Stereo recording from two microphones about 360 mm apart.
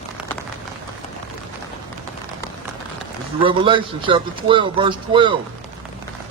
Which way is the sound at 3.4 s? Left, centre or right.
Centre.